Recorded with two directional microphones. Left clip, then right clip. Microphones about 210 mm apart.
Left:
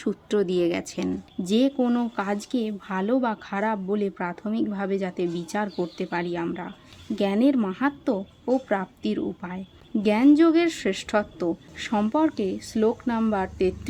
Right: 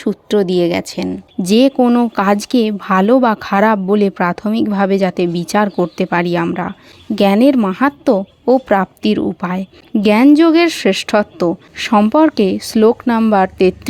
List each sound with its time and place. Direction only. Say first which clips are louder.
0.0 s speech: right 10 dB; 30° right (ahead or behind)
1.4 s speech: right 12 dB; 45° right (ahead or behind)
2.2 s speech: right 14 dB; 45° right (ahead or behind)